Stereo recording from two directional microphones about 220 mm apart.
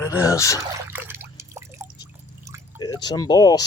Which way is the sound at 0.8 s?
10° right (ahead or behind).